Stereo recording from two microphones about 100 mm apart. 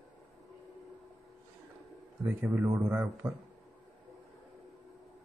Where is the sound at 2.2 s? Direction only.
15° right (ahead or behind).